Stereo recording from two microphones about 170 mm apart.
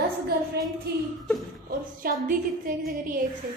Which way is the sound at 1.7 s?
55° right (ahead or behind).